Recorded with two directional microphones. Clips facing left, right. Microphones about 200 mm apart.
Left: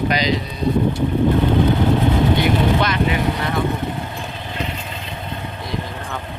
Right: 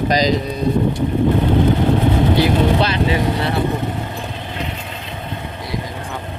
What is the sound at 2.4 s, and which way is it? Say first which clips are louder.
Speech: right 2 dB; 30° right (ahead or behind).